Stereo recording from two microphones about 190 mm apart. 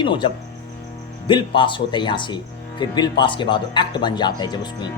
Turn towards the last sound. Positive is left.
turn(degrees=20)  # may be behind; listen again after turning